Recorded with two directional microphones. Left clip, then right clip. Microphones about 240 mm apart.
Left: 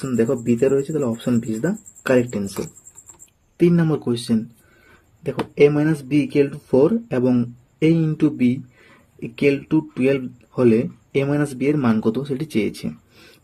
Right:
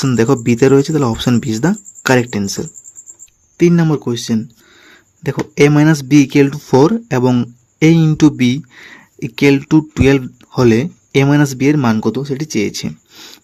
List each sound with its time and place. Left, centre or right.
0.0 s speech: right
3.6 s speech: right